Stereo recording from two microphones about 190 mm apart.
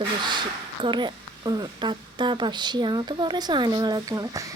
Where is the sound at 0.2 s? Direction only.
25° right (ahead or behind).